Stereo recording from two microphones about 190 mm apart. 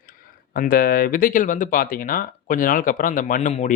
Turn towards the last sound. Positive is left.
turn(degrees=40)  # may be behind; listen again after turning